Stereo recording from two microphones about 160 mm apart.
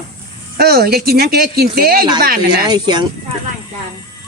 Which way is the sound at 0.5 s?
75° right (ahead or behind).